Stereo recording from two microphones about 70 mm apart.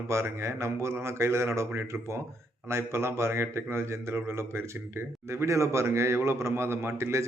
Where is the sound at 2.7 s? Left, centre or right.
Right.